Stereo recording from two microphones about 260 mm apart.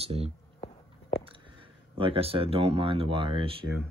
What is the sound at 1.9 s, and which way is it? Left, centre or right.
Speech, right.